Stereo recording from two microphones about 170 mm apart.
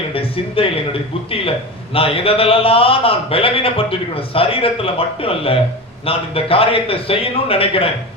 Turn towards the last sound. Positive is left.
turn(degrees=35)  # may be behind; listen again after turning